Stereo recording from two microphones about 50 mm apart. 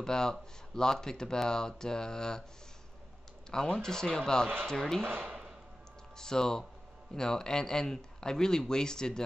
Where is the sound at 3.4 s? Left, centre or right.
Centre.